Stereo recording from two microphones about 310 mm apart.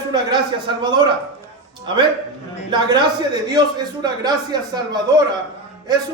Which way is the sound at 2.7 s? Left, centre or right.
Centre.